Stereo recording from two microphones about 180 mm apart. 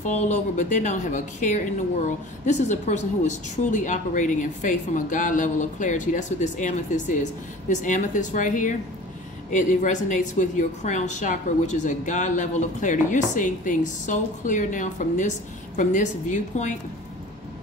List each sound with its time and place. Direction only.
0.0 s a woman's voice: 40° left (ahead or behind)